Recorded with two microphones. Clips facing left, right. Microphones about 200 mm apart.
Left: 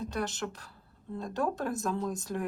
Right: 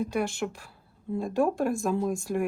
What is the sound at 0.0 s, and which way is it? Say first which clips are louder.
Speech: right 6 dB; 10° right (ahead or behind).